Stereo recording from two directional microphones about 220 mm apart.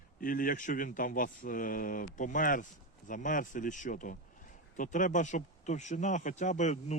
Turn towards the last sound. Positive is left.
turn(degrees=35)  # may be behind; listen again after turning